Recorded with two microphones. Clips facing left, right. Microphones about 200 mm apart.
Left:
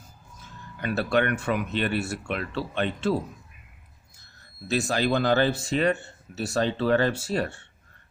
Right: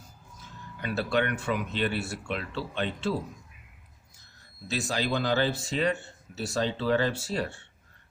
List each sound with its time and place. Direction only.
0.8 s speech: 55° left (ahead or behind)
4.7 s speech: 55° left (ahead or behind)